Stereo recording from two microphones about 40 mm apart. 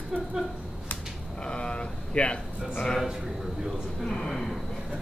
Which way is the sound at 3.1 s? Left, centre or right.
Centre.